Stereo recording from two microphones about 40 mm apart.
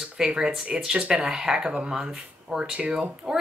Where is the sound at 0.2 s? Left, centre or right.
Centre.